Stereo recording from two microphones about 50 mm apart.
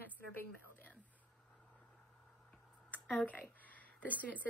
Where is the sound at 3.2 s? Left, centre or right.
Left.